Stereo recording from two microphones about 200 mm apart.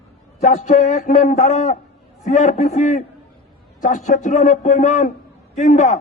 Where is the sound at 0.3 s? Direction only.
35° left (ahead or behind).